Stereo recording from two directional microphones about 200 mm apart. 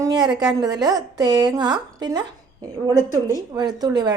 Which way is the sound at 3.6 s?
20° right (ahead or behind).